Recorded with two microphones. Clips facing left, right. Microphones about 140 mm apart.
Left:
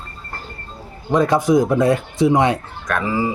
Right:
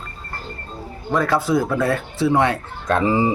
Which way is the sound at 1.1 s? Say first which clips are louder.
Left 4 dB; 20° left (ahead or behind).